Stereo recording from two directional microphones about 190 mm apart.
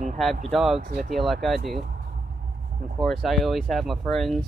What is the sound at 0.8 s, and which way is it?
Speech, 45° right (ahead or behind).